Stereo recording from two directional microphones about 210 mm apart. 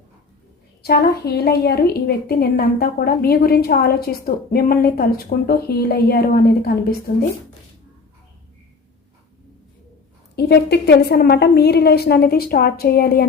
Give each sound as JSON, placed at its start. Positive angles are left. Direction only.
{"t": 0.8, "sound": "a woman's voice", "side_deg": 50}
{"t": 10.3, "sound": "a woman's voice", "side_deg": 50}